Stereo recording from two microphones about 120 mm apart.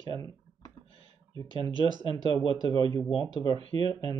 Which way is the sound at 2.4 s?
40° left (ahead or behind).